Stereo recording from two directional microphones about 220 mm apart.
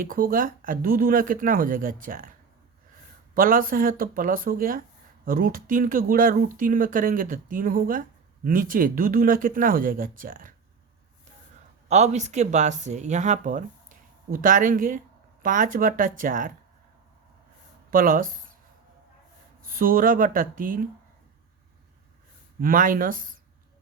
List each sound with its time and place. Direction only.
0.0 s speech: 40° right (ahead or behind)
3.3 s speech: 40° right (ahead or behind)
11.9 s speech: 30° right (ahead or behind)
17.9 s speech: 40° right (ahead or behind)
19.7 s speech: 40° right (ahead or behind)
22.6 s speech: 40° right (ahead or behind)